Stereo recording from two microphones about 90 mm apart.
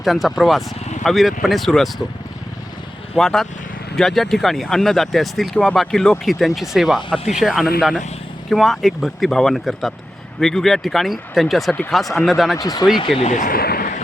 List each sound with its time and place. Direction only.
0.0 s speech: centre (ahead or behind)
3.2 s speech: 5° left (ahead or behind)
12.5 s speech: 40° left (ahead or behind)
13.1 s speech: centre (ahead or behind)